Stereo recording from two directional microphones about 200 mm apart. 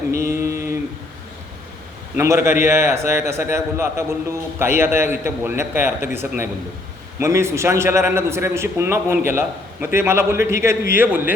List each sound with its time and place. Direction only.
0.2 s mantra: 15° right (ahead or behind)
2.1 s a man's voice: 15° right (ahead or behind)